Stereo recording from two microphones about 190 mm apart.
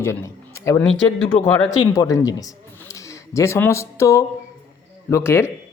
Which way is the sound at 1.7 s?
20° left (ahead or behind).